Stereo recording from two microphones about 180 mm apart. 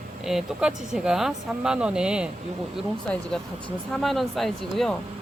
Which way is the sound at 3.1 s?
10° left (ahead or behind).